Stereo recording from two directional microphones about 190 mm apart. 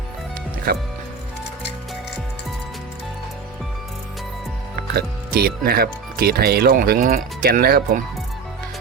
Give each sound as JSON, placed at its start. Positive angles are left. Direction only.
{"t": 4.9, "sound": "speech", "side_deg": -55}